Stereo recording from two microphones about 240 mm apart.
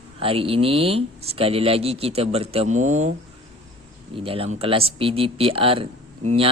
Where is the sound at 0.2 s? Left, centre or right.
Right.